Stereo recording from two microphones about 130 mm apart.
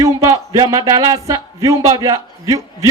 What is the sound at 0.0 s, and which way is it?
Speech, 25° right (ahead or behind).